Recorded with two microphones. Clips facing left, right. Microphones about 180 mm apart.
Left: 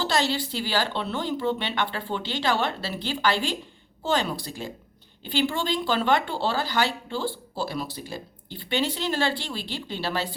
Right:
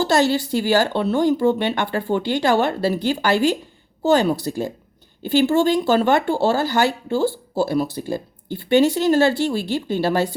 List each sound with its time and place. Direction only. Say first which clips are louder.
0.1 s speech: right 8 dB; 45° right (ahead or behind)